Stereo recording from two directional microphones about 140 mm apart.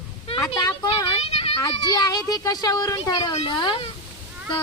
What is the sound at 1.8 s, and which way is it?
A child's voice, 30° left (ahead or behind).